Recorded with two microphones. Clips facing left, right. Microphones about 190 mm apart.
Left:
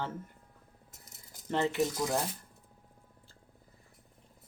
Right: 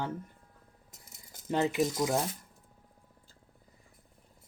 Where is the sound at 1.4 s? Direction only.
15° right (ahead or behind).